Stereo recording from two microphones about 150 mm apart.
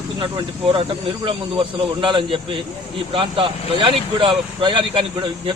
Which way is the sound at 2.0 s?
35° right (ahead or behind).